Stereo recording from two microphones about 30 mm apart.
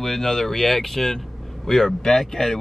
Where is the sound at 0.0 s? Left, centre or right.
Centre.